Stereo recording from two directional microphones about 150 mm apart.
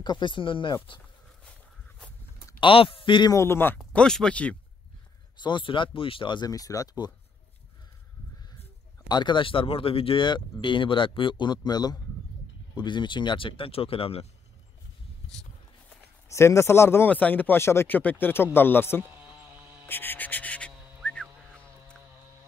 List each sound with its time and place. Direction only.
0.0 s speech: 30° left (ahead or behind)
2.6 s speech: 35° left (ahead or behind)
3.3 s speech: 15° left (ahead or behind)
5.4 s speech: 30° left (ahead or behind)
9.1 s speech: 30° left (ahead or behind)
16.3 s speech: 20° left (ahead or behind)
19.0 s a sound: 10° right (ahead or behind)
19.9 s music: 15° left (ahead or behind)